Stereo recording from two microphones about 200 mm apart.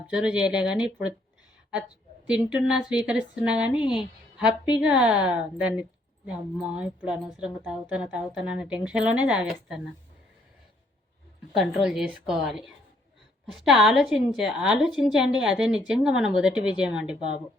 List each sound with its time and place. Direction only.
0.1 s a woman's voice: 5° right (ahead or behind)
2.6 s a woman's voice: 5° right (ahead or behind)
11.5 s a woman's voice: centre (ahead or behind)